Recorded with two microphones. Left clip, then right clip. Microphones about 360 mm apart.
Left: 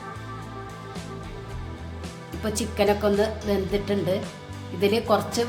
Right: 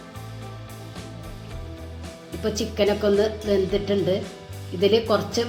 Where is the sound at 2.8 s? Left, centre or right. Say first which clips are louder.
Right 1 dB; left.